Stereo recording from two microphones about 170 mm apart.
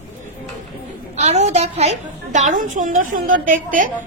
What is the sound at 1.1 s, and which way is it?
A woman's voice, 40° right (ahead or behind).